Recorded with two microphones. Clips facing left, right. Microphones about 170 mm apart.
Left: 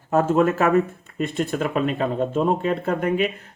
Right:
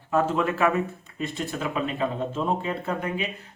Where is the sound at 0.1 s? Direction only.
45° left (ahead or behind).